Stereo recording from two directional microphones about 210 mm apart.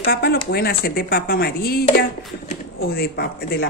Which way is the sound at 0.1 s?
45° left (ahead or behind).